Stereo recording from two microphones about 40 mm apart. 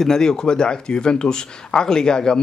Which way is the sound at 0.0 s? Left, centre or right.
Centre.